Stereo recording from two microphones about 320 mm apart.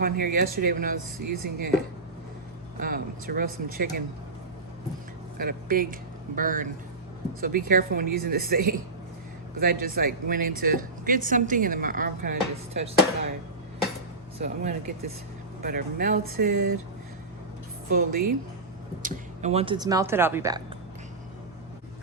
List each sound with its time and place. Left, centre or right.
0.0 s speech: right
2.7 s speech: right
5.4 s speech: right
14.4 s speech: right
17.8 s speech: right; by 20.6 s centre